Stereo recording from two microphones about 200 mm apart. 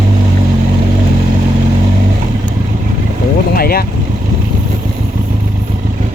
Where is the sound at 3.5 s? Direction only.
50° left (ahead or behind).